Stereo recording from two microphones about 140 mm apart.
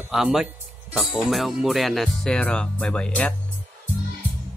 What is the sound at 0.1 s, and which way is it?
Speech, 5° right (ahead or behind).